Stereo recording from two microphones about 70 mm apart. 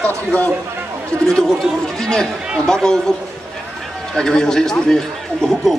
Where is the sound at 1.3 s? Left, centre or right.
Centre.